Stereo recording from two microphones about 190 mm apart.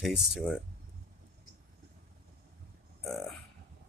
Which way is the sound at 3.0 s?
Centre (ahead or behind).